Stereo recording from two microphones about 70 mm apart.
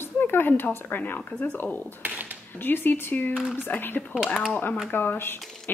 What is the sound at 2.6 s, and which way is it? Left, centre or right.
A woman's voice, left.